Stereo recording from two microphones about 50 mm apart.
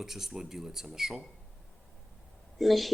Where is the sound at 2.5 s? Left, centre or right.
Centre.